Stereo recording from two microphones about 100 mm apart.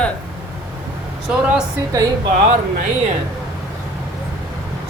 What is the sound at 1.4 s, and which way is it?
Speech, 10° right (ahead or behind).